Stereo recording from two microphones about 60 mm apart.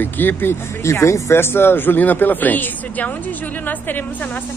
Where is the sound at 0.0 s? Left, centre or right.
Left.